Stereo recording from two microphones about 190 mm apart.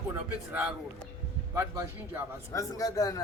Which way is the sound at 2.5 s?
20° left (ahead or behind).